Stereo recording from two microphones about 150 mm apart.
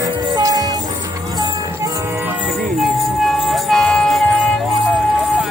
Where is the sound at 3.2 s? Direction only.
Centre (ahead or behind).